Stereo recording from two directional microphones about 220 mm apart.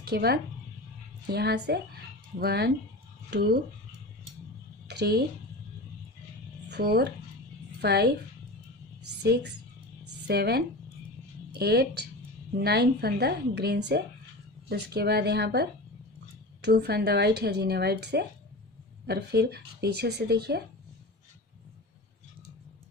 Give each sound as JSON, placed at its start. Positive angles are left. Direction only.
{"t": 0.0, "sound": "speech", "side_deg": -45}
{"t": 4.8, "sound": "a sound", "side_deg": -50}
{"t": 6.7, "sound": "a woman's voice", "side_deg": -45}
{"t": 9.2, "sound": "speech", "side_deg": -50}